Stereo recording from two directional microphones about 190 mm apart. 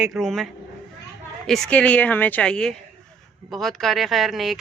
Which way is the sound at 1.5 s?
5° left (ahead or behind).